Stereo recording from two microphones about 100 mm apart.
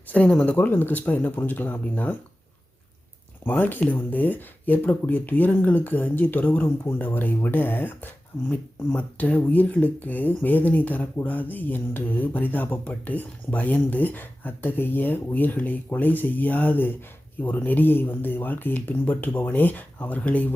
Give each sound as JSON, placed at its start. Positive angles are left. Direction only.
{"t": 0.1, "sound": "speech", "side_deg": 10}
{"t": 3.4, "sound": "speech", "side_deg": 20}